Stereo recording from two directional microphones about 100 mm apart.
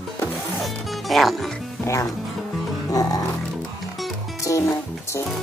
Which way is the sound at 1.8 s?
30° left (ahead or behind).